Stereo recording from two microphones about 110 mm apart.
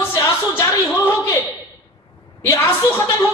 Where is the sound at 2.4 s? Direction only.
25° left (ahead or behind).